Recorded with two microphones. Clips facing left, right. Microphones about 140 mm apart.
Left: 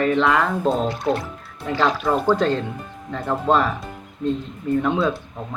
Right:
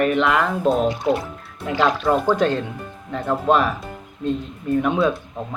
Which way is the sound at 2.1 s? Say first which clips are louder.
Even; 15° right (ahead or behind).